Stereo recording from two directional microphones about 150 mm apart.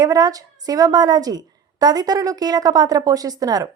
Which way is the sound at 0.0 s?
25° right (ahead or behind).